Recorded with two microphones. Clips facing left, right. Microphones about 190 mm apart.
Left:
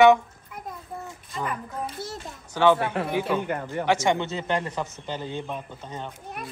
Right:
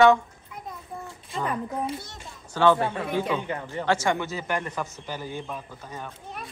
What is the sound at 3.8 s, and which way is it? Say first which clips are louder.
A man's voice: left 2 dB; 15° left (ahead or behind).